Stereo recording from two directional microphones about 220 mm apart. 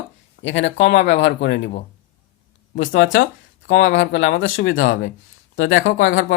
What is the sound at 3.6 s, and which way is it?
Speech, 55° left (ahead or behind).